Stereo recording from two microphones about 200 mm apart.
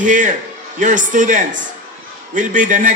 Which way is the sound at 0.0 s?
40° right (ahead or behind).